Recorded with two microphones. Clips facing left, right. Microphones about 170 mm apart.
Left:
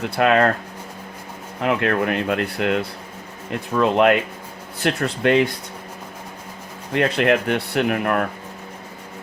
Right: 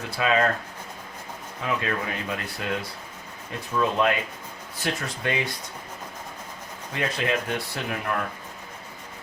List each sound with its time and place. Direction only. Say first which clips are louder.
0.2 s speech: left 6 dB; 65° left (ahead or behind)
1.6 s speech: left 8 dB; 65° left (ahead or behind)
6.9 s speech: left 9 dB; 65° left (ahead or behind)